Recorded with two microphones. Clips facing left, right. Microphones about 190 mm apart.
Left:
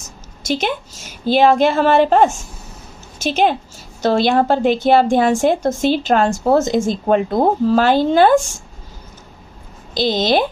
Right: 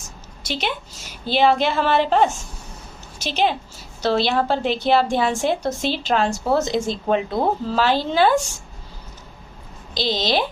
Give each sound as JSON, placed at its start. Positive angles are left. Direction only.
{"t": 0.4, "sound": "a woman's voice", "side_deg": 45}
{"t": 9.9, "sound": "a woman's voice", "side_deg": 50}